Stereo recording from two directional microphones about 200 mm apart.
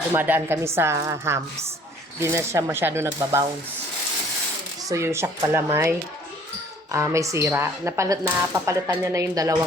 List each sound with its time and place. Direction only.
0.1 s speech: 10° right (ahead or behind)
4.8 s speech: 15° right (ahead or behind)
6.9 s speech: 15° right (ahead or behind)